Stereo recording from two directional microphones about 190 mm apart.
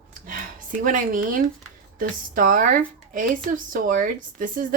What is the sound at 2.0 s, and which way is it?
Speech, 45° right (ahead or behind).